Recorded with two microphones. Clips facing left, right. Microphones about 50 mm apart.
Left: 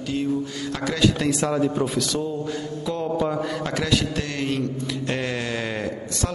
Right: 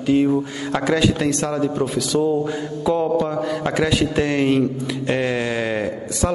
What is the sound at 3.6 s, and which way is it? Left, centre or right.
A man's voice, centre.